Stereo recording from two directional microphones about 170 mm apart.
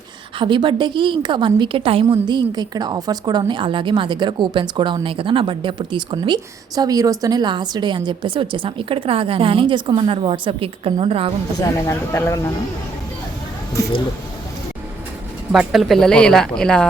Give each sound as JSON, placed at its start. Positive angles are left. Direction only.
{"t": 0.3, "sound": "a woman's voice", "side_deg": -30}
{"t": 11.9, "sound": "speech", "side_deg": 15}
{"t": 15.5, "sound": "a woman's voice", "side_deg": 0}